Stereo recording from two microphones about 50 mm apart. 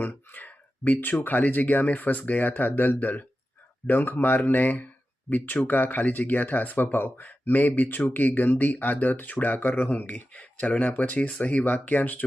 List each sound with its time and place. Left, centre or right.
0.3 s speech: left